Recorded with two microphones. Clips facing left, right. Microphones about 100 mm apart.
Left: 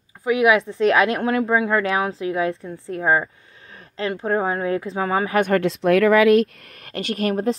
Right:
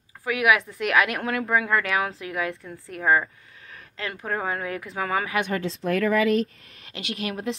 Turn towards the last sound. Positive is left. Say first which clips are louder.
# left 8 dB
turn(degrees=40)  # may be behind; listen again after turning